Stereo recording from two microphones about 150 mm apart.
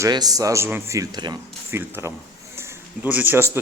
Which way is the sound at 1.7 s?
15° right (ahead or behind).